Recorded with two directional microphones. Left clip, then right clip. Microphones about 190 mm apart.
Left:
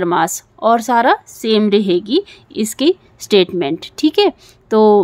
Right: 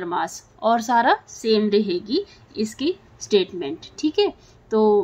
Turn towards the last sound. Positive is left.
turn(degrees=55)  # may be behind; listen again after turning